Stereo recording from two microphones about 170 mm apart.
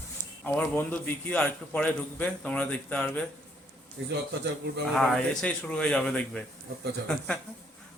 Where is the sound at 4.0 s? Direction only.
90° right.